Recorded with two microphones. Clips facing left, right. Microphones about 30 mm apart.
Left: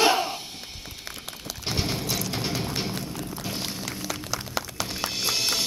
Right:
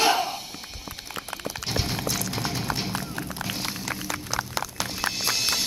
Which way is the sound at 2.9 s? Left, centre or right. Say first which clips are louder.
Right 1 dB; right.